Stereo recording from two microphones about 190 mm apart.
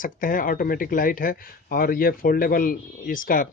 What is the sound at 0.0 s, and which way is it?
Speech, 45° left (ahead or behind).